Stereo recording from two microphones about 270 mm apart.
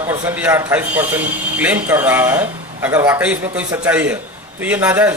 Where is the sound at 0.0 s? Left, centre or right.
Centre.